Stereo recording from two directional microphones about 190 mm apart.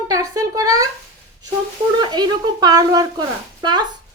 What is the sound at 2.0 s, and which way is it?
A woman's voice, 20° right (ahead or behind).